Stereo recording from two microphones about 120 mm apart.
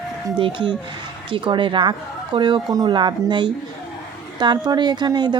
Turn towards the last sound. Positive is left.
turn(degrees=-35)  # may be behind; listen again after turning